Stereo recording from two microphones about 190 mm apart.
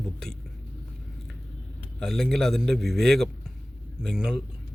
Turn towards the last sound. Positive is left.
turn(degrees=-5)  # may be behind; listen again after turning